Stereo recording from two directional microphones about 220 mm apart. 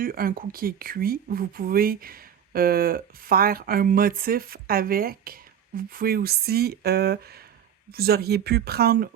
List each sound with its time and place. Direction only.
0.0 s speech: 40° right (ahead or behind)